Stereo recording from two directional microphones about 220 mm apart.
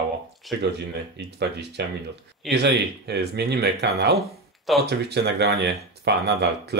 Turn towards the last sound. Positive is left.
turn(degrees=-50)  # may be behind; listen again after turning